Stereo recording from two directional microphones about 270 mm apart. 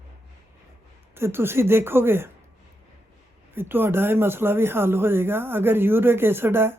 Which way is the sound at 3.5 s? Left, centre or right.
Centre.